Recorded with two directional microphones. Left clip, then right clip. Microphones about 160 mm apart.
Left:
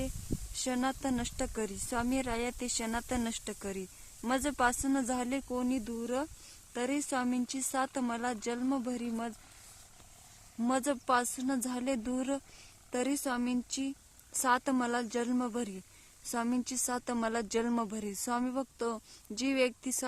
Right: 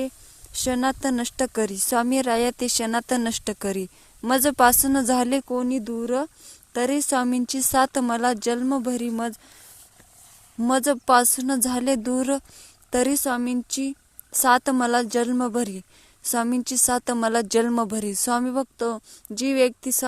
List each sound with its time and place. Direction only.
0.5 s a woman's voice: 40° right (ahead or behind)
10.7 s speech: 40° right (ahead or behind)